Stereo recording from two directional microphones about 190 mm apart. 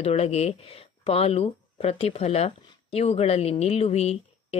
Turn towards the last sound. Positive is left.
turn(degrees=35)  # may be behind; listen again after turning